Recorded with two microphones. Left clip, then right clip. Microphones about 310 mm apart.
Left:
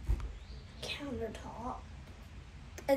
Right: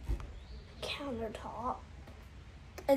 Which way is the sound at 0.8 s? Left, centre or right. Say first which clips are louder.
Right 1 dB; centre.